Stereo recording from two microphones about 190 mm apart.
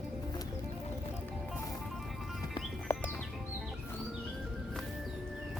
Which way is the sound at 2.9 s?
15° left (ahead or behind).